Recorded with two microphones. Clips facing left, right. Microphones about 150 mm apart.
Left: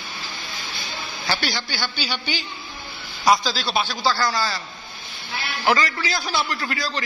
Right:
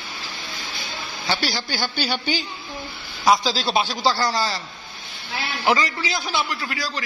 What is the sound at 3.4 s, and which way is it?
Speech, 25° right (ahead or behind).